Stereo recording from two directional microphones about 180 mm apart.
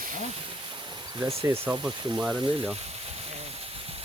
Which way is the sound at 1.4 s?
5° right (ahead or behind).